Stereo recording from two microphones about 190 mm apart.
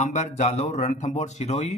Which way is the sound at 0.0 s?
35° left (ahead or behind).